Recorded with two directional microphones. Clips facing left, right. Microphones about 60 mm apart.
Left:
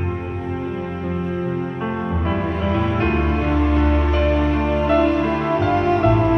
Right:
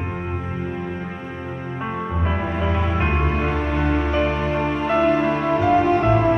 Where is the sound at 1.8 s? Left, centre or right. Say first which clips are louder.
Even; centre.